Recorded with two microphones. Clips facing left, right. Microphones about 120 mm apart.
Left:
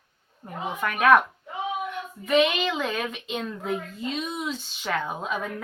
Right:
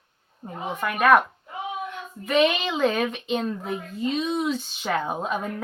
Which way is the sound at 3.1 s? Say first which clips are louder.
Right 5 dB; 35° right (ahead or behind).